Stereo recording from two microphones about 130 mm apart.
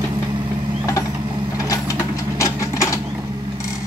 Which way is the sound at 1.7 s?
25° left (ahead or behind).